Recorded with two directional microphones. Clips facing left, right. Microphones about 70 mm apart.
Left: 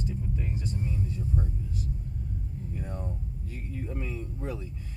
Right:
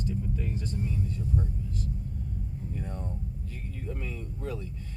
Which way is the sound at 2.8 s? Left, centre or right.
Centre.